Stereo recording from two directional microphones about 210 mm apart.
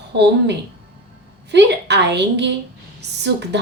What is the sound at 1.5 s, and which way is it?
A woman's voice, 55° right (ahead or behind).